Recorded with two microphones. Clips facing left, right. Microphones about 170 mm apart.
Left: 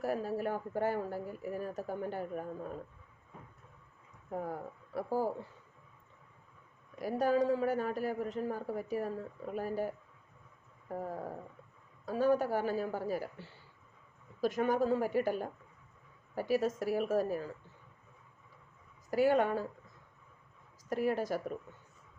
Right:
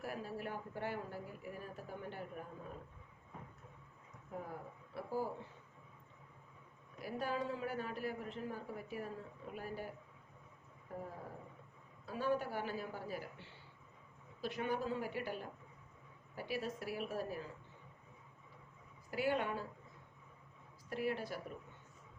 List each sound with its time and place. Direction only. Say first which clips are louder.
0.0 s a woman's voice: left 10 dB; 40° left (ahead or behind)
4.3 s a woman's voice: left 8 dB; 40° left (ahead or behind)
7.0 s a woman's voice: left 10 dB; 40° left (ahead or behind)
12.0 s a woman's voice: left 8 dB; 40° left (ahead or behind)
19.1 s a woman's voice: left 9 dB; 40° left (ahead or behind)
20.9 s speech: left 7 dB; 45° left (ahead or behind)